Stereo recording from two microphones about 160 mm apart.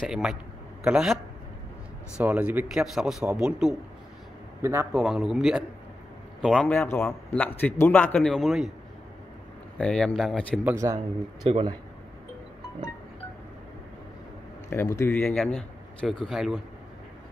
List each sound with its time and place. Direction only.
0.1 s speech: 5° right (ahead or behind)
4.6 s a man's voice: 15° right (ahead or behind)
4.9 s a man's voice: 5° right (ahead or behind)
9.8 s speech: 5° left (ahead or behind)
10.6 s speech: 15° right (ahead or behind)
11.0 s speech: 35° right (ahead or behind)
14.7 s a man's voice: 15° left (ahead or behind); by 16.6 s centre (ahead or behind)